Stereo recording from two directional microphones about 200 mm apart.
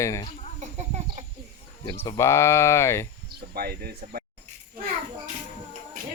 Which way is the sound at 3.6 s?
50° right (ahead or behind).